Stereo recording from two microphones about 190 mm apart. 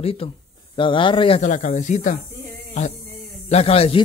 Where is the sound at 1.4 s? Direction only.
40° left (ahead or behind).